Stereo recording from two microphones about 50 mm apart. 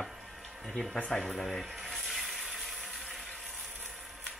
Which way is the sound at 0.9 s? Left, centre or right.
Left.